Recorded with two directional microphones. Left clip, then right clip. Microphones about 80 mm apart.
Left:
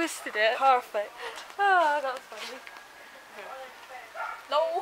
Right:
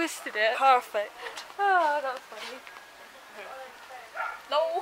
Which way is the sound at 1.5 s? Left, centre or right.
Left.